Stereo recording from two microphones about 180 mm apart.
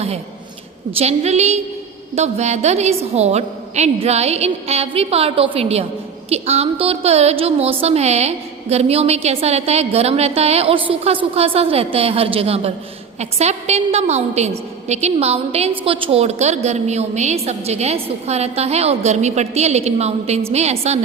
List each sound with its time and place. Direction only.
0.9 s a woman's voice: 35° right (ahead or behind)